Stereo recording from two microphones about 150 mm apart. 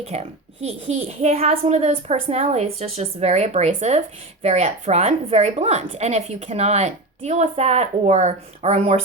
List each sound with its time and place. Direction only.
0.0 s a woman's voice: 45° right (ahead or behind)